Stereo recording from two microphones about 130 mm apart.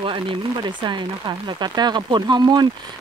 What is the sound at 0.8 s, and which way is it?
Speech, 35° right (ahead or behind).